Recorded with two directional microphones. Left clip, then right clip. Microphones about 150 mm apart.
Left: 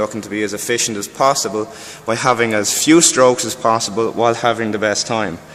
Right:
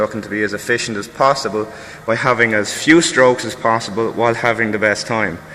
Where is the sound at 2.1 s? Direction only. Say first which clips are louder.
Right 1 dB; 60° left (ahead or behind).